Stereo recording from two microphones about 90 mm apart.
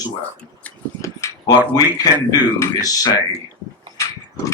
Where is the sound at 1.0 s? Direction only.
40° left (ahead or behind).